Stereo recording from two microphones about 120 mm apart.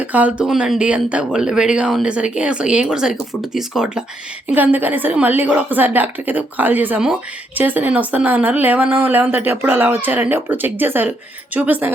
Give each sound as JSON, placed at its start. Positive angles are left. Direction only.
{"t": 0.0, "sound": "a woman's voice", "side_deg": -10}